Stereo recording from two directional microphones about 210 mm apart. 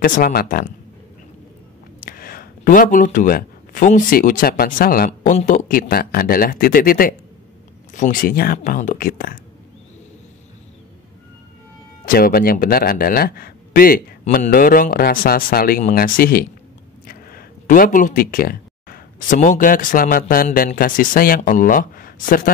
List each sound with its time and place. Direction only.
0.0 s speech: 40° left (ahead or behind)
2.0 s speech: 40° left (ahead or behind)
12.1 s speech: 45° left (ahead or behind)